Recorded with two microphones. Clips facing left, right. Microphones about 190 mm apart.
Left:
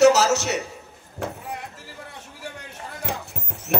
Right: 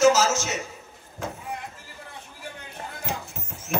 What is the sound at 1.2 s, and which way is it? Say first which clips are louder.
Speech: left 3 dB; 65° left (ahead or behind).